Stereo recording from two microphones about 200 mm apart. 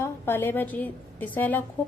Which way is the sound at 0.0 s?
10° left (ahead or behind).